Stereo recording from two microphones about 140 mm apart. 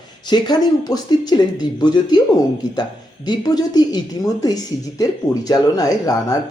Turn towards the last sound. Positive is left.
turn(degrees=25)  # may be behind; listen again after turning